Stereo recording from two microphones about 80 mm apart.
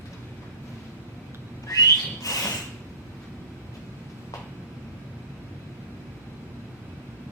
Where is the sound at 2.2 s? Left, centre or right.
Left.